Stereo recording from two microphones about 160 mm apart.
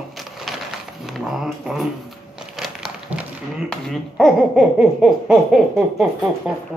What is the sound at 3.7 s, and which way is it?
Speech, centre (ahead or behind).